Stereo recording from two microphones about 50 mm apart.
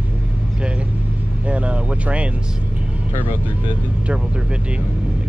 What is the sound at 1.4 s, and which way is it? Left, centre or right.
Speech, right.